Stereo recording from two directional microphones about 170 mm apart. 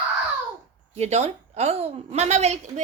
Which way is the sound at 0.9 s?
40° right (ahead or behind).